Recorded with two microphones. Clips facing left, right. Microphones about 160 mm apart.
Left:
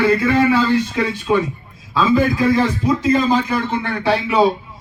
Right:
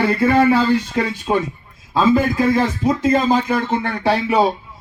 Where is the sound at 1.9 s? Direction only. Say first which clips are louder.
Even; 45° right (ahead or behind).